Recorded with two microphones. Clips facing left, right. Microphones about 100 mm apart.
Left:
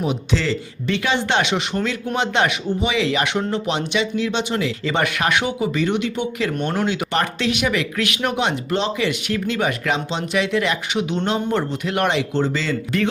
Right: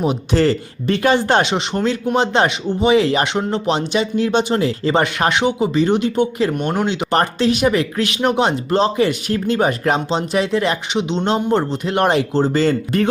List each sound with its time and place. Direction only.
0.0 s speech: 45° right (ahead or behind)
6.5 s speech: 15° right (ahead or behind)
7.1 s speech: 40° right (ahead or behind)
12.5 s speech: 45° right (ahead or behind)